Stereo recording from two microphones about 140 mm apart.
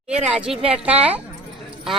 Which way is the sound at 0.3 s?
5° right (ahead or behind).